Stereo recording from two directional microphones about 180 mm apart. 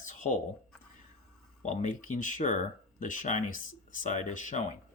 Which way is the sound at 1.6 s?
45° left (ahead or behind).